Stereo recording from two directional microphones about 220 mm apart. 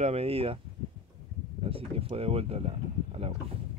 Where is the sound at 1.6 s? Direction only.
25° right (ahead or behind).